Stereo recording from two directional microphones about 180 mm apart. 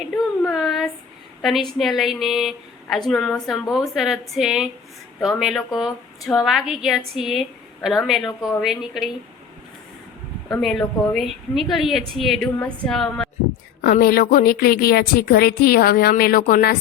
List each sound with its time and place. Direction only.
0.5 s a sound: centre (ahead or behind)
1.4 s a woman's voice: centre (ahead or behind)
10.5 s a woman's voice: centre (ahead or behind)
13.8 s a woman's voice: 55° left (ahead or behind)